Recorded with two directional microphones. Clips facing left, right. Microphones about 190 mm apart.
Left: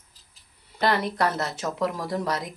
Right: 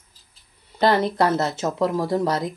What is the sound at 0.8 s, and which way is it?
Speech, 25° right (ahead or behind).